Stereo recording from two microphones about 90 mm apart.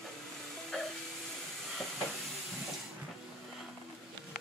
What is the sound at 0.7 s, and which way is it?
Vacuum cleaner, 5° left (ahead or behind).